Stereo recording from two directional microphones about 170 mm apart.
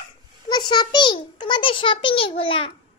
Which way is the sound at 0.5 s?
25° left (ahead or behind).